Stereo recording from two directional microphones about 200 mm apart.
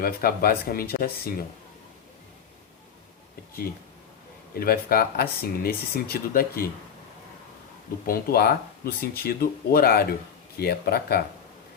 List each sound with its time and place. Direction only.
0.0 s speech: 50° left (ahead or behind)
4.5 s speech: 50° left (ahead or behind)
8.0 s speech: 50° left (ahead or behind)